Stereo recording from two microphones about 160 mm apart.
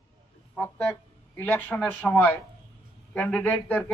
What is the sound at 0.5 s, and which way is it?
Music, 10° left (ahead or behind).